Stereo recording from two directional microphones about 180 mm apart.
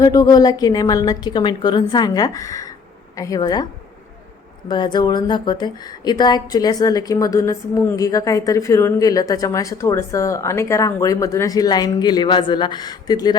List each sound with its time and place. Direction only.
0.0 s speech: 20° left (ahead or behind)
4.7 s speech: 25° left (ahead or behind)